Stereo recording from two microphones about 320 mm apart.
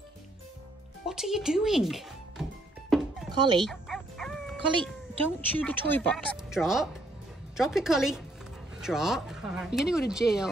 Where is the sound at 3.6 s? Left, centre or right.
Centre.